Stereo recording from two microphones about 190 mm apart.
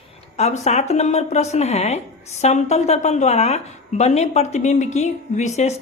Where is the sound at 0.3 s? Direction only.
35° left (ahead or behind).